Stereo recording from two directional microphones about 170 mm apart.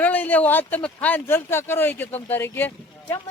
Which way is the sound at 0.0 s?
10° left (ahead or behind).